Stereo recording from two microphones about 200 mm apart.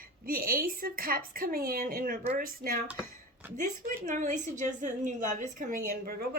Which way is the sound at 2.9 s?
5° right (ahead or behind).